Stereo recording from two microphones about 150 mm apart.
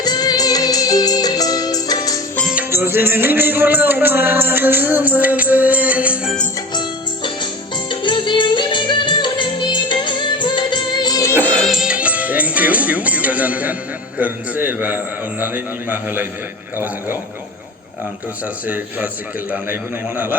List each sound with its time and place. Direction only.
0.0 s music: 25° left (ahead or behind)
2.5 s speech: 15° right (ahead or behind)
7.9 s music: 30° left (ahead or behind)
11.4 s music: 5° left (ahead or behind)
14.2 s a man's voice: 10° right (ahead or behind)
18.7 s a man's voice: 10° right (ahead or behind)